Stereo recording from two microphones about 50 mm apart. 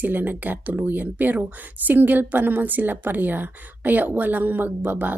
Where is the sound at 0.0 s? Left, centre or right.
Right.